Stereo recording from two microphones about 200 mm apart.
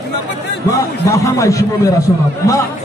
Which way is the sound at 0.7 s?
15° left (ahead or behind).